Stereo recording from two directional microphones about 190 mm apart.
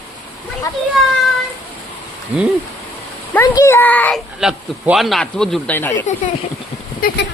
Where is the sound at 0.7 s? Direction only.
15° left (ahead or behind).